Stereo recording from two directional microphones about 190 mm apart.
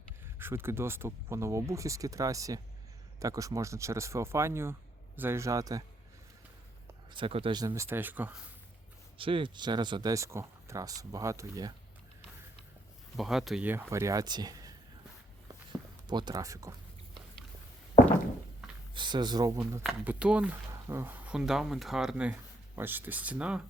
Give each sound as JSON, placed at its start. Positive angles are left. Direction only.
{"t": 0.3, "sound": "speech", "side_deg": -10}
{"t": 7.1, "sound": "speech", "side_deg": -25}
{"t": 9.1, "sound": "speech", "side_deg": -25}
{"t": 13.1, "sound": "speech", "side_deg": 0}
{"t": 16.0, "sound": "speech", "side_deg": -20}
{"t": 18.9, "sound": "speech", "side_deg": -25}
{"t": 19.8, "sound": "speech", "side_deg": -5}